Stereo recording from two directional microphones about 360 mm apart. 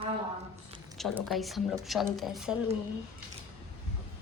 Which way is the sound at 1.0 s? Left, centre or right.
Centre.